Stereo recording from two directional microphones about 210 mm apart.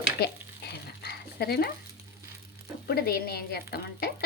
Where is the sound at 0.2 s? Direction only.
50° left (ahead or behind).